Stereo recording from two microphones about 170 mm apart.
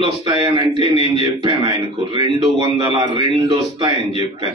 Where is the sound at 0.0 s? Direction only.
25° right (ahead or behind).